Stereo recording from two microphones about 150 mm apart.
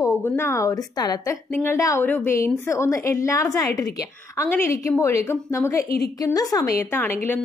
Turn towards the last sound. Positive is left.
turn(degrees=15)  # may be behind; listen again after turning